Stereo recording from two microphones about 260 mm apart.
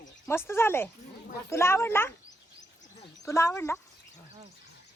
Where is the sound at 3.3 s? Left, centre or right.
Centre.